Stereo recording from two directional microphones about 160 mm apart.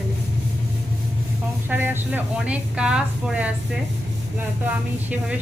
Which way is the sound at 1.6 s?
10° right (ahead or behind).